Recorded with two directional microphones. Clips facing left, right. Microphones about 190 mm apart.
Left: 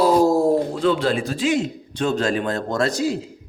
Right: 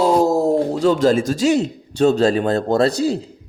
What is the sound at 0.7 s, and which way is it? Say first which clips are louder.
A man's voice: right 5 dB; 45° right (ahead or behind).